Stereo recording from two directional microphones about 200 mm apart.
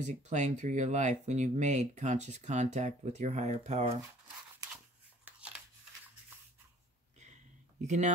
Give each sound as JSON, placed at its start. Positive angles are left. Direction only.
{"t": 0.0, "sound": "speech", "side_deg": -35}
{"t": 7.8, "sound": "speech", "side_deg": -35}